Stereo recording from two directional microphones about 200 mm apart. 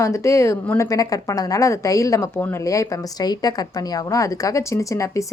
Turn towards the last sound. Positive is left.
turn(degrees=15)  # may be behind; listen again after turning